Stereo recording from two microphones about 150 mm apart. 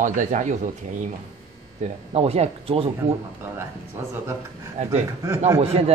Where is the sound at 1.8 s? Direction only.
45° right (ahead or behind).